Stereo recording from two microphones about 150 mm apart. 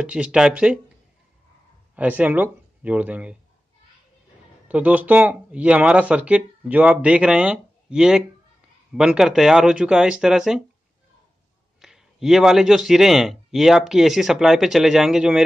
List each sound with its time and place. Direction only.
0.0 s speech: 5° right (ahead or behind)
2.0 s speech: 10° right (ahead or behind)
4.6 s speech: 10° right (ahead or behind)
11.8 s speech: centre (ahead or behind)